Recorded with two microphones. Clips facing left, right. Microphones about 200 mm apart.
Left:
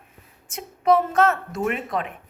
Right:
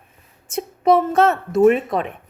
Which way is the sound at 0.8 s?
25° right (ahead or behind).